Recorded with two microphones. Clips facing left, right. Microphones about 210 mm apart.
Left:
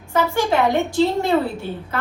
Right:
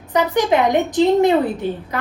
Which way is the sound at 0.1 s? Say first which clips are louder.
Right 3 dB; 20° right (ahead or behind).